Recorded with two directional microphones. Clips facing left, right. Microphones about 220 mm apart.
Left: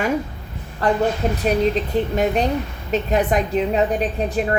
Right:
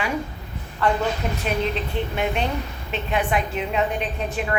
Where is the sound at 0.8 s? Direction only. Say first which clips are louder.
Left 4 dB; 40° left (ahead or behind).